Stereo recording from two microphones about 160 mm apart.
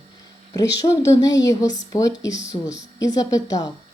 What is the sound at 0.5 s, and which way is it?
A woman's voice, 25° left (ahead or behind).